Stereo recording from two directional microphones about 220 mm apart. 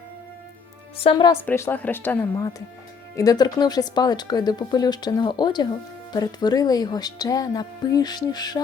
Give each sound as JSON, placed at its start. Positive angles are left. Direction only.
{"t": 0.9, "sound": "speech", "side_deg": 20}